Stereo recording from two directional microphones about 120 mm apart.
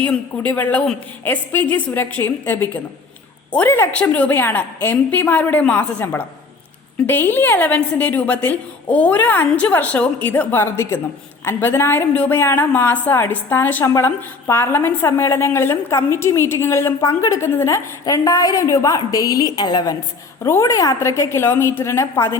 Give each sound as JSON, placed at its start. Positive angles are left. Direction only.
{"t": 0.0, "sound": "a woman's voice", "side_deg": 15}